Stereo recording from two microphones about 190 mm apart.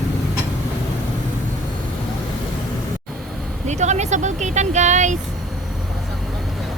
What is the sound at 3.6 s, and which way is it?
Speech, 40° right (ahead or behind).